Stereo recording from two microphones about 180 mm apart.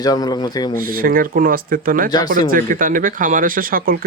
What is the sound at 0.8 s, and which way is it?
A man's voice, 55° right (ahead or behind).